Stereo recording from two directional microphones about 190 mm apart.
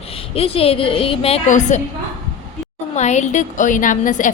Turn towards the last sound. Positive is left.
turn(degrees=40)  # may be behind; listen again after turning